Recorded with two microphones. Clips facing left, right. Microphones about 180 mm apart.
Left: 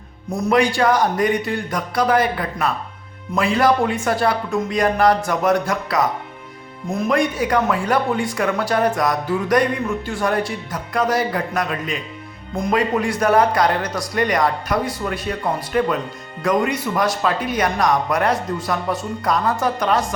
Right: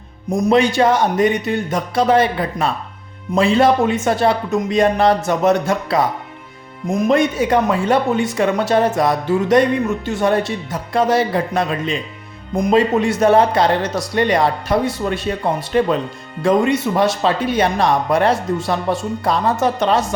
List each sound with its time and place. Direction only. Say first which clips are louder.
0.3 s speech: right 3 dB; 20° right (ahead or behind)